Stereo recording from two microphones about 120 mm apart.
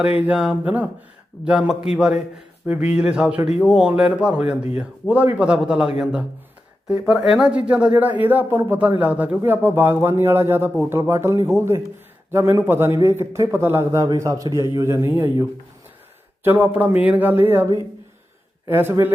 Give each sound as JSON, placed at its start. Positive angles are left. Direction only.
{"t": 0.2, "sound": "a man's voice", "side_deg": -5}
{"t": 7.3, "sound": "a man's voice", "side_deg": -5}
{"t": 18.7, "sound": "a man's voice", "side_deg": -20}